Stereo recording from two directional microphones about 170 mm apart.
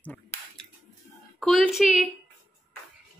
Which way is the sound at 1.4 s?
Centre (ahead or behind).